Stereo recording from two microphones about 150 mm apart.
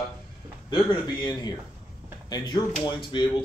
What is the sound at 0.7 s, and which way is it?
Speech, 30° left (ahead or behind).